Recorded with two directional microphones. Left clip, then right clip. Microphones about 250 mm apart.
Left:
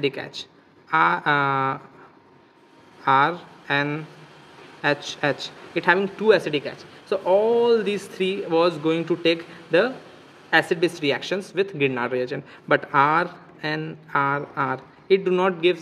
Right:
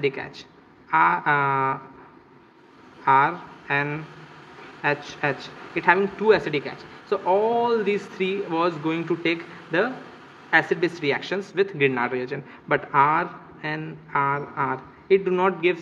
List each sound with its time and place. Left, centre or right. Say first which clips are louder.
0.0 s speech: even; left
3.0 s speech: even; left